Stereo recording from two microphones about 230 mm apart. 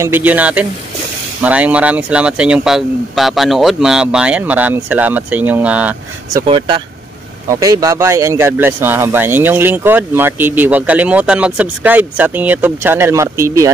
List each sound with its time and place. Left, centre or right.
0.0 s speech: centre
6.4 s speech: right